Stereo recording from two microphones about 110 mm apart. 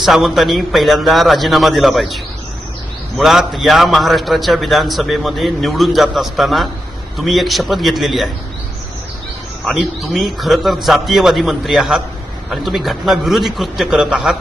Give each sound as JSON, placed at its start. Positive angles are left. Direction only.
{"t": 0.0, "sound": "a man's voice", "side_deg": 0}
{"t": 9.6, "sound": "a man's voice", "side_deg": 0}